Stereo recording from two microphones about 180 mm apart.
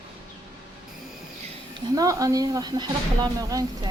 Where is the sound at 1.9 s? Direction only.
20° right (ahead or behind).